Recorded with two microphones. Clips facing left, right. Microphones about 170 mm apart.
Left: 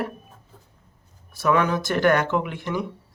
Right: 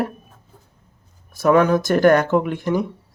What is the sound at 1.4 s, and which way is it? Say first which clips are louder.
Speech: right 6 dB; 45° right (ahead or behind).